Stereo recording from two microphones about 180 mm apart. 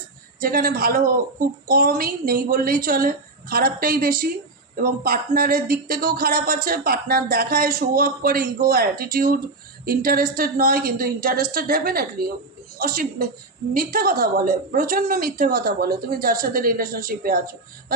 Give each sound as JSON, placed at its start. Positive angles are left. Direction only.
{"t": 0.3, "sound": "a woman's voice", "side_deg": -55}